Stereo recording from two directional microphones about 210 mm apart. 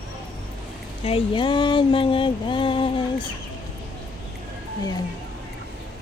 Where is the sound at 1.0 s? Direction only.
25° left (ahead or behind).